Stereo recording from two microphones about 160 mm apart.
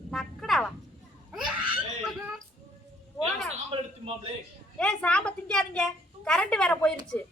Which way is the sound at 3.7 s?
35° right (ahead or behind).